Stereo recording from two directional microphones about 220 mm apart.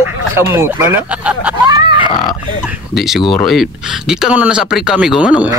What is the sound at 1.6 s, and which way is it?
Grunt, 20° right (ahead or behind).